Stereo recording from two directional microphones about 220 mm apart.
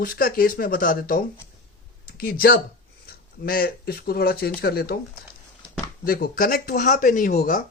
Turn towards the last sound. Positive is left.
turn(degrees=40)  # may be behind; listen again after turning